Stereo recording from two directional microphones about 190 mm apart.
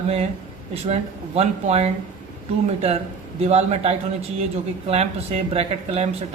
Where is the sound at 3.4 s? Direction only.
35° right (ahead or behind).